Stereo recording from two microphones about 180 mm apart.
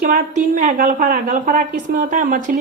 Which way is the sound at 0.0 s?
50° right (ahead or behind).